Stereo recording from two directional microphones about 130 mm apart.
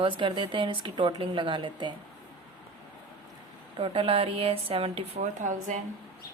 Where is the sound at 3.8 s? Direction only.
45° right (ahead or behind); by 5.7 s 75° right (ahead or behind).